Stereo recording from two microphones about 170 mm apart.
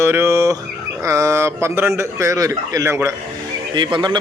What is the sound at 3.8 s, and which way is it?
Speech, 25° right (ahead or behind).